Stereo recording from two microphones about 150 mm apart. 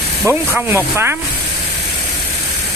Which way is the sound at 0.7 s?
15° right (ahead or behind).